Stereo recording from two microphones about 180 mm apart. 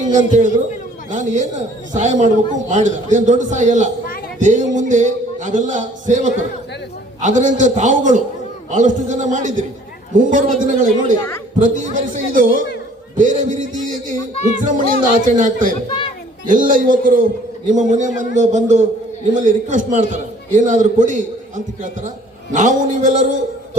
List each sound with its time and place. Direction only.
0.1 s a man's voice: 45° right (ahead or behind)